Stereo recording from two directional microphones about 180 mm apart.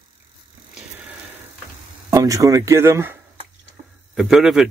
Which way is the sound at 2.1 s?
20° right (ahead or behind).